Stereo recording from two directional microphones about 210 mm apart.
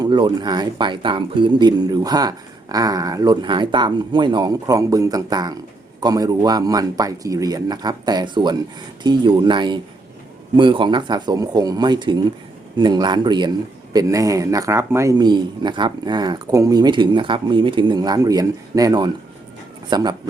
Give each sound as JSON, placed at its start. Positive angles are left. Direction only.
{"t": 0.0, "sound": "speech", "side_deg": -20}